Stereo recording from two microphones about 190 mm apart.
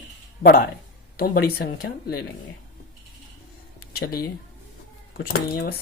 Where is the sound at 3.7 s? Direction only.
55° left (ahead or behind).